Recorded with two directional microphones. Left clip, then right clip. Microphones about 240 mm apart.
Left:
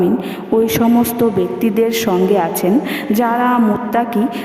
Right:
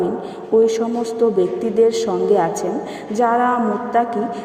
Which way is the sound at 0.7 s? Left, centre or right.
Left.